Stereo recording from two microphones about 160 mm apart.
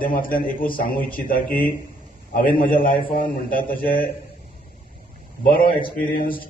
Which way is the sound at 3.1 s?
60° left (ahead or behind).